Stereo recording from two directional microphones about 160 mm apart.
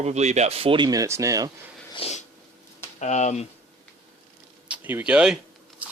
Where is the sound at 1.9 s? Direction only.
40° left (ahead or behind).